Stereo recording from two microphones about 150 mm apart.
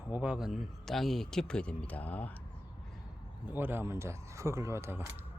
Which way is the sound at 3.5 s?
15° right (ahead or behind).